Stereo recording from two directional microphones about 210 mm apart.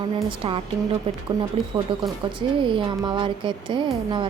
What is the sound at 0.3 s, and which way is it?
Speech, 25° right (ahead or behind).